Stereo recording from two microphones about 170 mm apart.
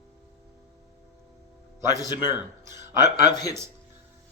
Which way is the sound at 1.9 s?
25° left (ahead or behind).